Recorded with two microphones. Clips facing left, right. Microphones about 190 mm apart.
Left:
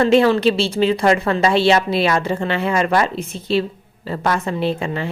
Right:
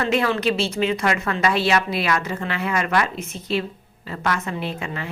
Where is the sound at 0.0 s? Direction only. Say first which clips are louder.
Left 7 dB; 30° left (ahead or behind).